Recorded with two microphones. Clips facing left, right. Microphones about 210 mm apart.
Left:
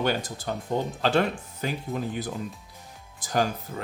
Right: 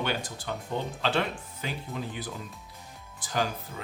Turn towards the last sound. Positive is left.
turn(degrees=45)  # may be behind; listen again after turning